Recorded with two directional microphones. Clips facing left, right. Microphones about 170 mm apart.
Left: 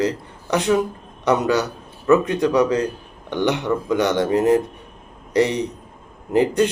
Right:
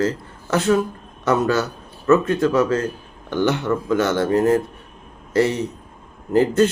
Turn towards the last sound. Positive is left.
turn(degrees=15)  # may be behind; listen again after turning